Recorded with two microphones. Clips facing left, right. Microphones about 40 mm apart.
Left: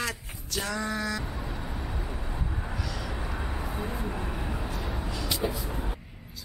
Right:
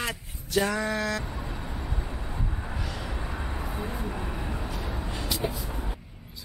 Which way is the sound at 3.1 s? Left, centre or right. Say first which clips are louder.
Even; centre.